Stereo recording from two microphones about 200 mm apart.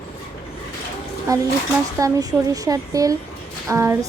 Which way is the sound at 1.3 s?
20° right (ahead or behind).